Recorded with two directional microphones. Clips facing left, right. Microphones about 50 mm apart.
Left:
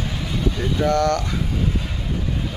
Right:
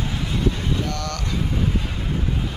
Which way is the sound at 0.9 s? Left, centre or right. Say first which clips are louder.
Left 10 dB; left.